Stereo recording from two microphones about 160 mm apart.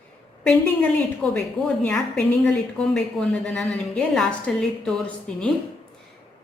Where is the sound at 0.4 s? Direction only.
5° left (ahead or behind).